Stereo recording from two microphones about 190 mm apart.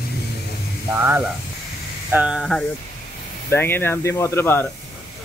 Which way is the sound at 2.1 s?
5° right (ahead or behind).